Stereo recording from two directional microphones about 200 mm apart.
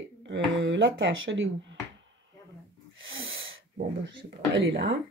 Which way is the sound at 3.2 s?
75° right (ahead or behind).